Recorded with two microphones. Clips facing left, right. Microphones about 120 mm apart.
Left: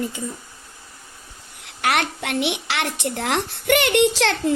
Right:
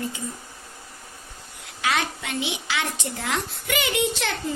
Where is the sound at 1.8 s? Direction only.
65° left (ahead or behind).